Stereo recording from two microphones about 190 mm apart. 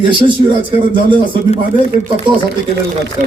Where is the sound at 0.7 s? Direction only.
25° right (ahead or behind).